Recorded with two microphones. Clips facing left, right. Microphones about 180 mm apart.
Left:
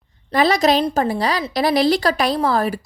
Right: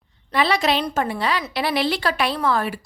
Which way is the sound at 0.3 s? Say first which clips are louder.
Left 4 dB; 40° left (ahead or behind).